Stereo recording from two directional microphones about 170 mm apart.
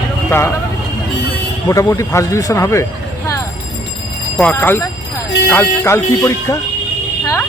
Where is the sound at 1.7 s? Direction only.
20° left (ahead or behind).